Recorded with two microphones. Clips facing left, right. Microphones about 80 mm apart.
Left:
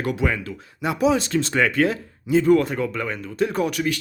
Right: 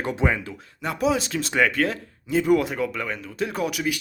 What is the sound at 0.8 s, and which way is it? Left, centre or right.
Speech, centre.